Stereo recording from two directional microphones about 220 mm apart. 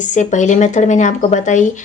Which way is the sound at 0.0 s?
35° left (ahead or behind).